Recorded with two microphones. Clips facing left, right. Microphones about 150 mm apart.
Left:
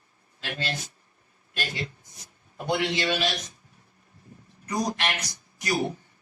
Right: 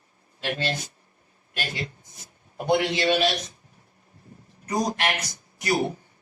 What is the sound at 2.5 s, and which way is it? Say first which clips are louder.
Speech: right 4 dB; 50° right (ahead or behind).